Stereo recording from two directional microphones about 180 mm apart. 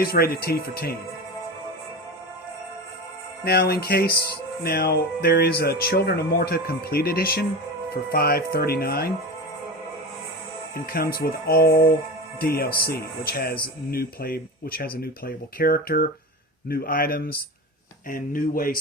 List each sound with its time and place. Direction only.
0.0 s speech: 55° left (ahead or behind)
3.4 s speech: 60° left (ahead or behind)
10.8 s speech: 55° left (ahead or behind)